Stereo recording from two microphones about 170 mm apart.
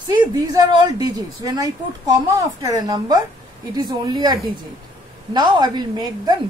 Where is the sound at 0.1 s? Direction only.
25° right (ahead or behind).